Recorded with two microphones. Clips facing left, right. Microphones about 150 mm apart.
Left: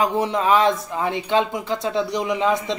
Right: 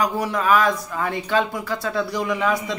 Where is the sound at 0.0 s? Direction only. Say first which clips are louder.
Left 2 dB; 25° left (ahead or behind).